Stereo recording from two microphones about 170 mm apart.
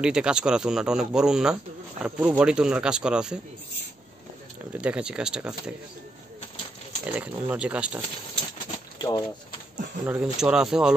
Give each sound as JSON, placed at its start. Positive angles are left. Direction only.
{"t": 0.0, "sound": "speech", "side_deg": -5}
{"t": 4.8, "sound": "speech", "side_deg": -5}
{"t": 7.1, "sound": "speech", "side_deg": -10}
{"t": 8.9, "sound": "pigeon", "side_deg": 20}
{"t": 10.0, "sound": "speech", "side_deg": -10}